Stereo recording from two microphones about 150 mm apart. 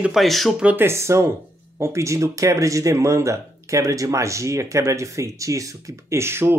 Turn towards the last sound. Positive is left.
turn(degrees=-15)  # may be behind; listen again after turning